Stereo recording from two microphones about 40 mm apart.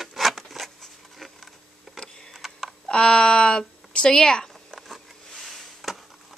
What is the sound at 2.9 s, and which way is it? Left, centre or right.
Speech, left.